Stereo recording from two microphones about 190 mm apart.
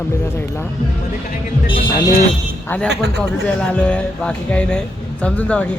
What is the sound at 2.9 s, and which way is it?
Speech, 60° right (ahead or behind).